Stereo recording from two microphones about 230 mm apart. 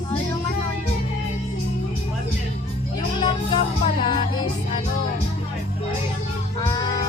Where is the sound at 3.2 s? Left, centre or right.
Left.